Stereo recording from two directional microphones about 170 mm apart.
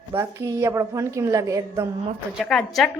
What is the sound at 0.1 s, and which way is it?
Speech, 15° right (ahead or behind).